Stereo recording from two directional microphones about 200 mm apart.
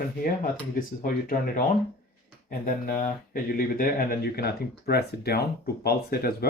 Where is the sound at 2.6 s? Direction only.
45° left (ahead or behind).